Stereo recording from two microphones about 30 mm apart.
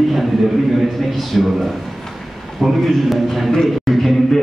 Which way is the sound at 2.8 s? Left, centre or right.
Centre.